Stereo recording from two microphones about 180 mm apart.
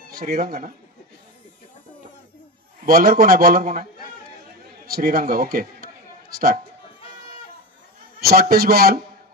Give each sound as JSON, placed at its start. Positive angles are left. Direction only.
{"t": 0.1, "sound": "a man's voice", "side_deg": -55}
{"t": 2.8, "sound": "a man's voice", "side_deg": -50}
{"t": 4.8, "sound": "a man's voice", "side_deg": -55}
{"t": 8.2, "sound": "a man's voice", "side_deg": -60}